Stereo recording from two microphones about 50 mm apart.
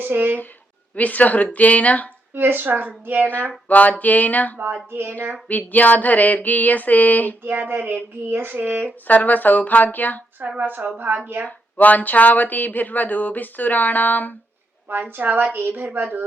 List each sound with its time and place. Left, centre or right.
0.0 s speech: right
0.9 s speech: left
2.3 s speech: right
3.7 s speech: left
4.5 s speech: right
5.5 s speech: left
7.4 s speech: right
9.0 s speech: left
10.6 s speech: right
11.4 s speech: left
14.8 s speech: right